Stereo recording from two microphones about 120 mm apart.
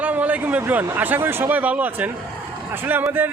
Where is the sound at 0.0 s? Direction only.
15° right (ahead or behind).